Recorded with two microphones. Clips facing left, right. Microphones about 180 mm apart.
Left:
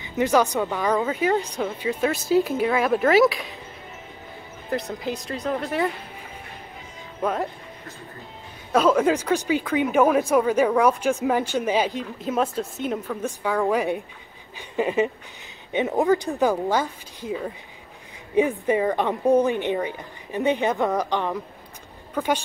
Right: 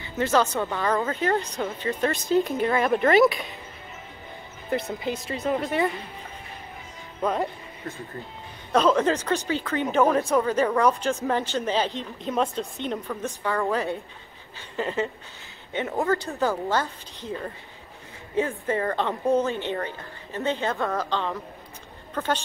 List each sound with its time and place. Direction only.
0.0 s speech: 15° left (ahead or behind)
4.6 s speech: centre (ahead or behind)
7.2 s speech: 5° left (ahead or behind)
8.7 s a woman's voice: 10° left (ahead or behind)